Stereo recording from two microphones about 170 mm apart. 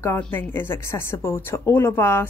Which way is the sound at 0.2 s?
10° left (ahead or behind).